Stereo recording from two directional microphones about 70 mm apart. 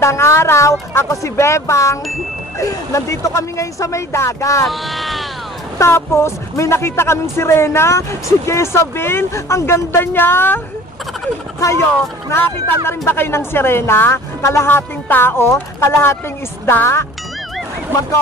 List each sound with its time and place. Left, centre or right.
0.0 s speech: left
4.6 s speech: centre
5.8 s speech: left
12.4 s speech: left